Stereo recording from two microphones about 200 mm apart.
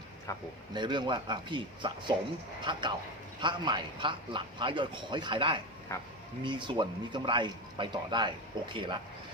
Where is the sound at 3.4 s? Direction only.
25° right (ahead or behind).